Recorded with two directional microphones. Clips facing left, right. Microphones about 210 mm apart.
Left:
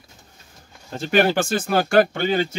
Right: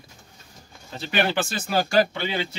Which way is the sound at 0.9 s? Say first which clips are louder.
Left 6 dB; 45° left (ahead or behind).